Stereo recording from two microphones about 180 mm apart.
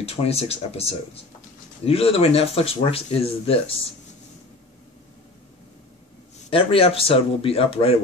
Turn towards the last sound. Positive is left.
turn(degrees=30)  # may be behind; listen again after turning